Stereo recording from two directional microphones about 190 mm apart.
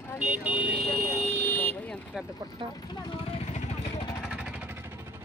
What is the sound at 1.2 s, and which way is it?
Vehicle, 10° left (ahead or behind).